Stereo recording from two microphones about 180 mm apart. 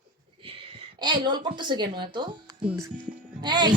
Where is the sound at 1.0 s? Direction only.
25° right (ahead or behind).